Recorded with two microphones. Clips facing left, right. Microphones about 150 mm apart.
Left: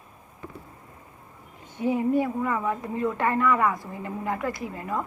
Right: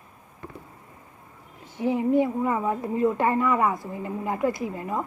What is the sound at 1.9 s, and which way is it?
A woman's voice, 20° right (ahead or behind).